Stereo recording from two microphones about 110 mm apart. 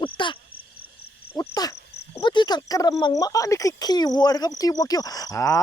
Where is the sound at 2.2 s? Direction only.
45° left (ahead or behind).